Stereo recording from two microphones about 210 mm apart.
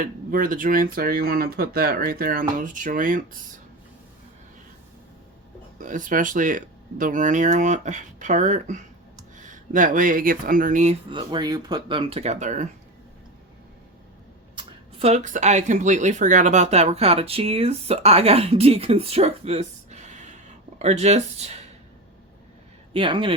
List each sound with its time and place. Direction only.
0.0 s speech: 40° right (ahead or behind)
5.8 s speech: 40° right (ahead or behind)
11.1 s speech: 20° right (ahead or behind)
14.5 s speech: 30° right (ahead or behind)
22.9 s speech: 25° right (ahead or behind)